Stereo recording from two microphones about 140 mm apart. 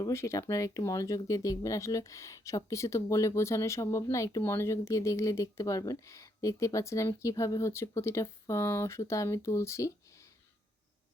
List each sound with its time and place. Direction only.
0.0 s speech: 20° left (ahead or behind)